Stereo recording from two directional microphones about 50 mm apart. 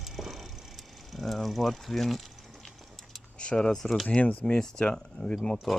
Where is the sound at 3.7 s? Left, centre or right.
Centre.